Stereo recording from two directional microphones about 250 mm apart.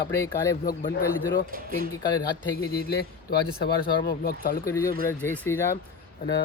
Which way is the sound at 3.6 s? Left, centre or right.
Left.